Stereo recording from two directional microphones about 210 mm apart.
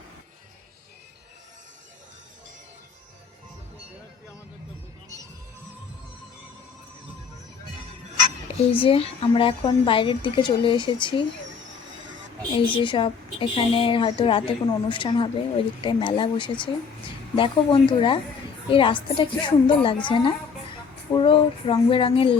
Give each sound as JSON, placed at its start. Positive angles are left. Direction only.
{"t": 8.7, "sound": "a woman's voice", "side_deg": 25}
{"t": 12.7, "sound": "a woman's voice", "side_deg": 25}